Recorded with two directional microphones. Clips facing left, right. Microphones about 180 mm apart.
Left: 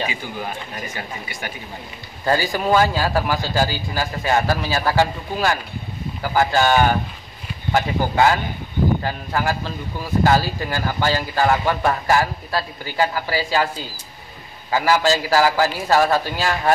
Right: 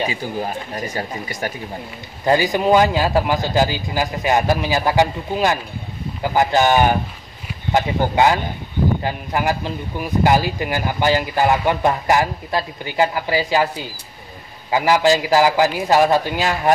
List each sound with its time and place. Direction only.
0.1 s speech: 35° right (ahead or behind)
2.2 s a man's voice: 20° right (ahead or behind)